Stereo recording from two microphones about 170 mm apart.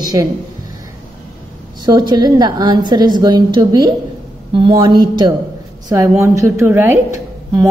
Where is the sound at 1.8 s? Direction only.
25° right (ahead or behind).